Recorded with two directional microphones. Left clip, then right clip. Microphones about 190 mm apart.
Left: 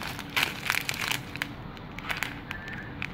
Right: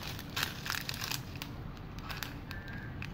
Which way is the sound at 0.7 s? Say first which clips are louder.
Left 9 dB; 15° left (ahead or behind).